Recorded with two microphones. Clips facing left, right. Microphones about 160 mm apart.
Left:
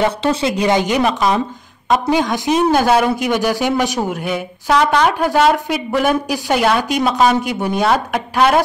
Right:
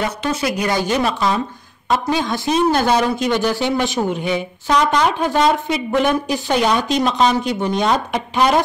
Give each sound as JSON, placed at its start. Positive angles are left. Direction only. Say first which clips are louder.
{"t": 0.0, "sound": "a woman's voice", "louder": "left 4 dB", "side_deg": 25}